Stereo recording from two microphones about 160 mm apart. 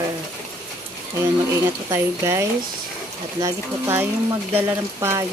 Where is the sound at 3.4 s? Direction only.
15° right (ahead or behind).